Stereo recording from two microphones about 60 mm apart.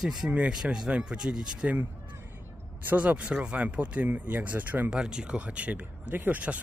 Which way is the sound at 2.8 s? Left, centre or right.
Right.